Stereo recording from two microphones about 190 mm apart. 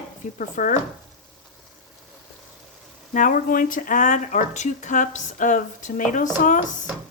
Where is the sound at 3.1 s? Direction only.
45° left (ahead or behind).